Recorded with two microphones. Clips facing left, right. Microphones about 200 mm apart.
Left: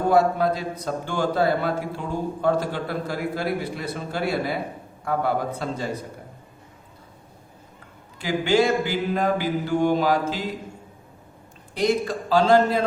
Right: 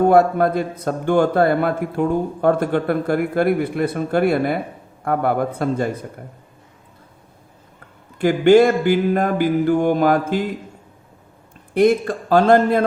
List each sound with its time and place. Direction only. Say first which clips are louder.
0.1 s a man's voice: right 5 dB; 55° right (ahead or behind)
8.2 s mantra: right 9 dB; 55° right (ahead or behind)
11.7 s a man's voice: right 7 dB; 55° right (ahead or behind)